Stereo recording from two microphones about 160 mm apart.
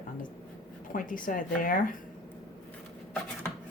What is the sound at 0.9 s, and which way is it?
Speech, 60° left (ahead or behind).